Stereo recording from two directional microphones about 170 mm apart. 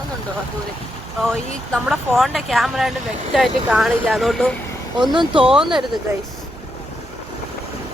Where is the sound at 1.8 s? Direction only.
5° right (ahead or behind).